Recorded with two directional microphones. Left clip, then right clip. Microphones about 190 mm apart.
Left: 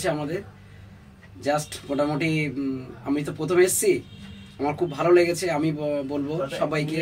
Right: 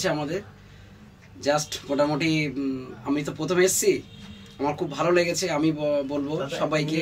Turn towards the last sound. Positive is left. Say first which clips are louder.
# right 1 dB
turn(degrees=0)  # may be behind; listen again after turning